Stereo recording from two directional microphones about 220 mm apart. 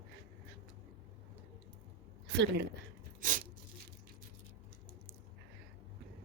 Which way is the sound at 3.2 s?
40° right (ahead or behind).